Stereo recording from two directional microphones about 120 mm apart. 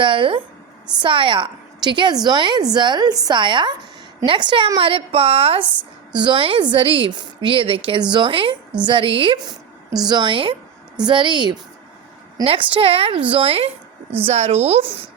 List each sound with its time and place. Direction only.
0.0 s a woman's voice: 45° right (ahead or behind)
5.6 s a woman's voice: 10° right (ahead or behind)
6.1 s a woman's voice: 40° right (ahead or behind)
12.5 s a woman's voice: 50° right (ahead or behind)
14.3 s speech: 60° right (ahead or behind)